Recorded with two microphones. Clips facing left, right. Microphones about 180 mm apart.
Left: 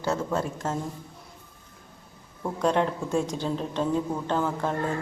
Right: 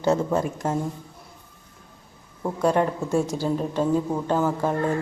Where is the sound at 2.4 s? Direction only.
10° right (ahead or behind).